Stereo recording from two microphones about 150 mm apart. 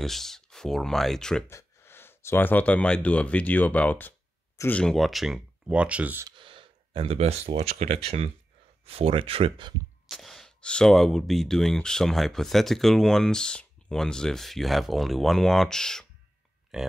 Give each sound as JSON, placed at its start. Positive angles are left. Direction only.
{"t": 0.0, "sound": "speech", "side_deg": 0}
{"t": 1.5, "sound": "speech", "side_deg": 20}
{"t": 6.2, "sound": "a sound", "side_deg": -35}
{"t": 7.7, "sound": "speech", "side_deg": -45}
{"t": 10.0, "sound": "speech", "side_deg": 0}